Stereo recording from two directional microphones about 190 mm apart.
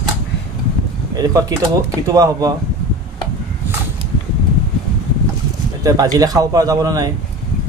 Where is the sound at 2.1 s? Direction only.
20° right (ahead or behind).